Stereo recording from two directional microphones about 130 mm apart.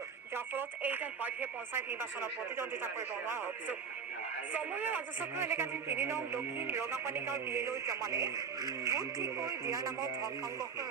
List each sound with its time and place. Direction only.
0.3 s a man's voice: 15° right (ahead or behind)